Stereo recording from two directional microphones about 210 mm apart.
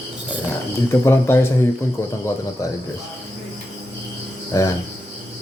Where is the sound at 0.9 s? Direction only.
10° left (ahead or behind).